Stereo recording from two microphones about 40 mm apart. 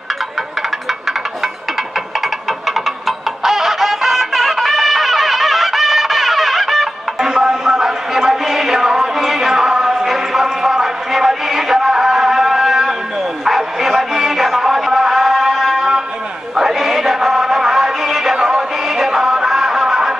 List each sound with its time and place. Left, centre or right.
2.6 s music: centre
7.2 s a sound: centre
14.1 s music: centre
16.5 s chant: centre
18.4 s music: centre